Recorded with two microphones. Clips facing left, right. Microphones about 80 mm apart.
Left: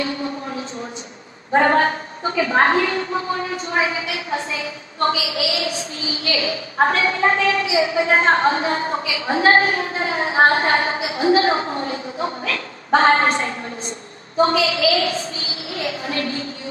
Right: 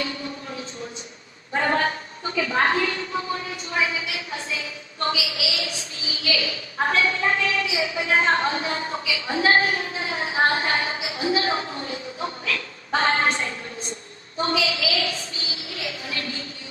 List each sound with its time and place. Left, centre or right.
1.5 s a woman's voice: left
7.6 s a man's voice: left
7.9 s a woman's voice: left
15.7 s a woman's voice: left